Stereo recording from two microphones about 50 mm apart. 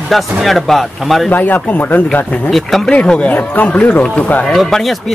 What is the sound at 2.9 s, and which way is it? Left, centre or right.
Speech, left.